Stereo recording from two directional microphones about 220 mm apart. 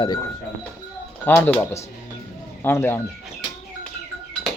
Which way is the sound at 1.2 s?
10° left (ahead or behind).